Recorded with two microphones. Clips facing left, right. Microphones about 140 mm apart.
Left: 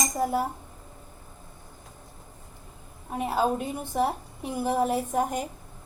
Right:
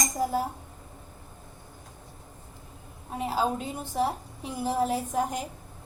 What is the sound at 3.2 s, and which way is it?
A woman's voice, 60° left (ahead or behind).